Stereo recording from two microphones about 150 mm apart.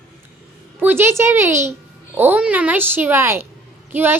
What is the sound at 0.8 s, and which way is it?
A woman's voice, 15° right (ahead or behind).